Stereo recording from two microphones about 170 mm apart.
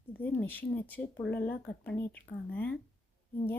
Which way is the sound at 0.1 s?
10° left (ahead or behind).